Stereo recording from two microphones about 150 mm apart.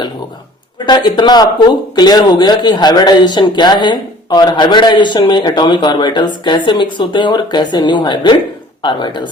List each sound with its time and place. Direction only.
0.9 s speech: 30° left (ahead or behind)